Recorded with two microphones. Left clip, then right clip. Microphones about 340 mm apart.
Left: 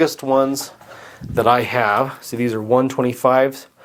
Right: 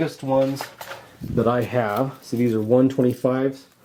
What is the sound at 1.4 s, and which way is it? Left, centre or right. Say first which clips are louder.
Speech: left 6 dB; left.